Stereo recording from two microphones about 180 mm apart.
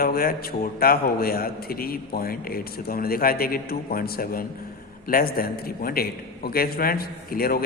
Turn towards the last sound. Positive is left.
turn(degrees=55)  # may be behind; listen again after turning